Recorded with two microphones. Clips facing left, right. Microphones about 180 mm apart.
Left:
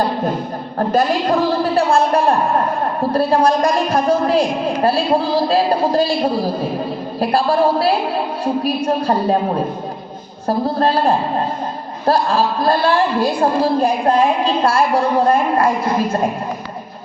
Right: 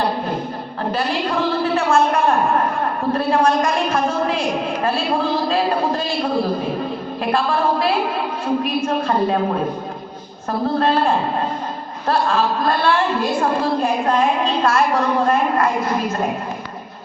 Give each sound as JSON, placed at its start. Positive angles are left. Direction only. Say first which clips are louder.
{"t": 0.8, "sound": "a woman's voice", "louder": "left 6 dB", "side_deg": 40}
{"t": 10.4, "sound": "a woman's voice", "louder": "left 2 dB", "side_deg": 35}